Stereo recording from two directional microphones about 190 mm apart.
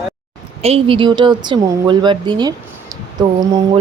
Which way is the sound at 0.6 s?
30° right (ahead or behind).